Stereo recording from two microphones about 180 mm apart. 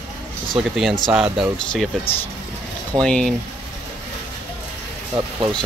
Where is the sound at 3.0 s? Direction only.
5° left (ahead or behind).